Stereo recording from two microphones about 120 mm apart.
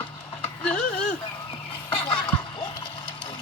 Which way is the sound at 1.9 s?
50° left (ahead or behind).